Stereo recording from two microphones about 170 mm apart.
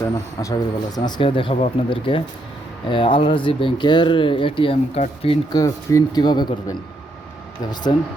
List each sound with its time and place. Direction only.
0.0 s speech: 20° left (ahead or behind)
5.5 s speech: 20° left (ahead or behind)
7.9 s speech: 30° left (ahead or behind)